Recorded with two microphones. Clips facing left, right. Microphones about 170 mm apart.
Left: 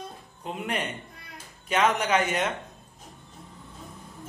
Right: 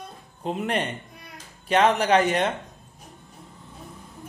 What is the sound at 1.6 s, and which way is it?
Speech, 35° right (ahead or behind).